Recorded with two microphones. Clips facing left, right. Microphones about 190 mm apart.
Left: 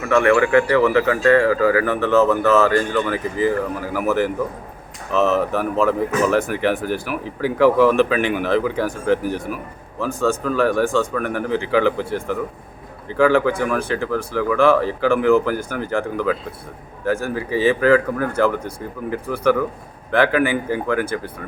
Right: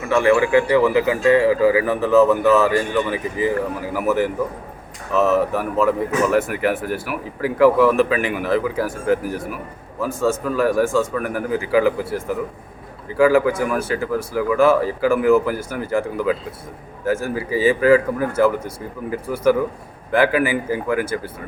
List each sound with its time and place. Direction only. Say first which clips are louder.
0.2 s a man's voice: even; 25° right (ahead or behind)
0.7 s speech: even; 10° right (ahead or behind)